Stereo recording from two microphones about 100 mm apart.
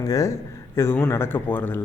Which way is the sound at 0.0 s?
35° left (ahead or behind).